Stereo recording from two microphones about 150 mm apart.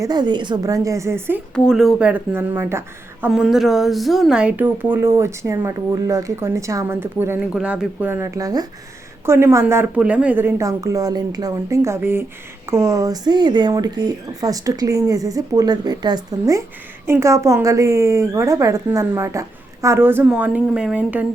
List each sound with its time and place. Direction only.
0.0 s a woman's voice: 30° right (ahead or behind)
1.5 s speech: centre (ahead or behind); by 3.4 s 15° right (ahead or behind)
3.4 s a woman's voice: centre (ahead or behind)